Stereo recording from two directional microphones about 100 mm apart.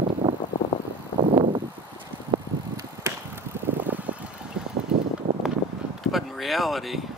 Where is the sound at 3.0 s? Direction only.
25° right (ahead or behind).